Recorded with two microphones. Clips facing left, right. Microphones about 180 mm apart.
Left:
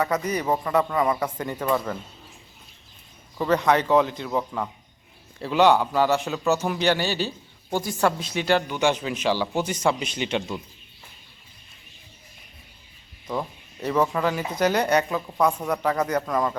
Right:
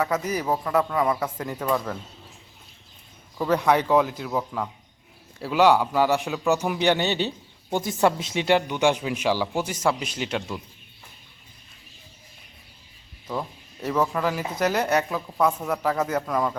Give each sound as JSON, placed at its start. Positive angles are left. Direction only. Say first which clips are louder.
{"t": 0.0, "sound": "speech", "louder": "left 1 dB", "side_deg": -5}
{"t": 3.3, "sound": "a man's voice", "louder": "even", "side_deg": -5}
{"t": 13.2, "sound": "speech", "louder": "left 1 dB", "side_deg": 0}